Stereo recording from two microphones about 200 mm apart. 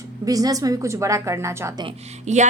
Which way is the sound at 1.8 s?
35° right (ahead or behind).